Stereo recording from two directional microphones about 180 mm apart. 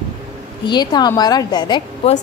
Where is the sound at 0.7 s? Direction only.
25° left (ahead or behind).